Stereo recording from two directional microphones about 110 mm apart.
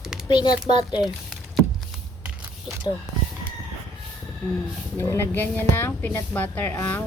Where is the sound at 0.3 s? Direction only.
45° left (ahead or behind).